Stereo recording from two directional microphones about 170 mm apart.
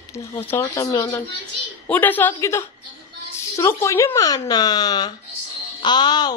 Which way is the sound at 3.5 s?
15° left (ahead or behind).